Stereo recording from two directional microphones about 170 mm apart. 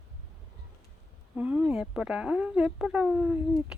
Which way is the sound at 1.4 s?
10° right (ahead or behind).